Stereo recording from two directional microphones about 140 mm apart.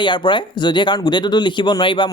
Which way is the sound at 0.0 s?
35° left (ahead or behind).